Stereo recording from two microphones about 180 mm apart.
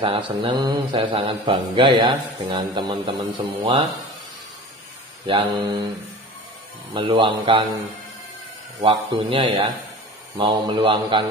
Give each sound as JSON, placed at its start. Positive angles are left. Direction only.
{"t": 0.0, "sound": "speech", "side_deg": -30}
{"t": 5.6, "sound": "speech", "side_deg": -25}
{"t": 6.9, "sound": "speech", "side_deg": -30}
{"t": 8.8, "sound": "speech", "side_deg": -30}